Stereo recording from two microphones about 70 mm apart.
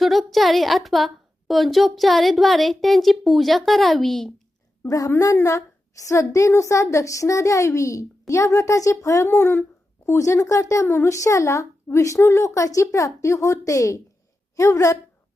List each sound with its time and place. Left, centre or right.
0.0 s a woman's voice: centre
4.9 s a woman's voice: left
10.1 s a woman's voice: left